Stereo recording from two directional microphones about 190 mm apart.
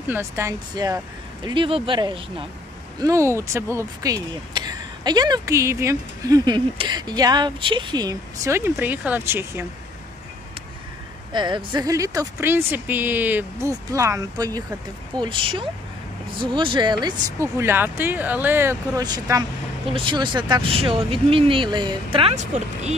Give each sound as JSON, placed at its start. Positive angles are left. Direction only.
{"t": 0.1, "sound": "speech", "side_deg": -15}
{"t": 11.3, "sound": "speech", "side_deg": -25}
{"t": 17.0, "sound": "speech", "side_deg": -15}